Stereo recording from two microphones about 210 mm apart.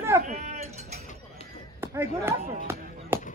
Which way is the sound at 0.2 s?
30° right (ahead or behind).